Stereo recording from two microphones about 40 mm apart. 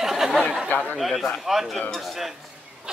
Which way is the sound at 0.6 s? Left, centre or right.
Left.